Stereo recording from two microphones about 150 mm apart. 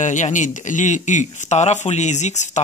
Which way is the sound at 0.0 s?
55° left (ahead or behind).